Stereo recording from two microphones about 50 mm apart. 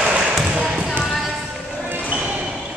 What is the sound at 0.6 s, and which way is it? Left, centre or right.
Basketball bounce, centre.